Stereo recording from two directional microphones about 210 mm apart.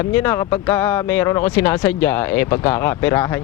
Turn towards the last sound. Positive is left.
turn(degrees=10)  # may be behind; listen again after turning